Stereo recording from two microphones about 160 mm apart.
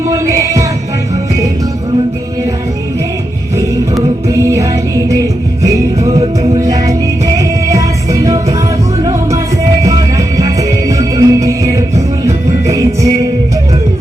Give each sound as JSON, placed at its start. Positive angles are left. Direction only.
{"t": 0.1, "sound": "music", "side_deg": -20}
{"t": 4.3, "sound": "music", "side_deg": -20}
{"t": 9.8, "sound": "music", "side_deg": -20}